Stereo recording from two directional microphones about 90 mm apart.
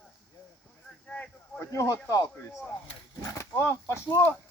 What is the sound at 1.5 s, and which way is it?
Speech, 35° left (ahead or behind).